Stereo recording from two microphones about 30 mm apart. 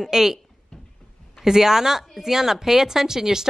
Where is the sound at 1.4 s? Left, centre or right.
Centre.